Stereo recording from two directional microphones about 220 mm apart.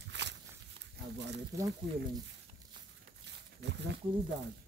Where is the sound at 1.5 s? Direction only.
15° right (ahead or behind).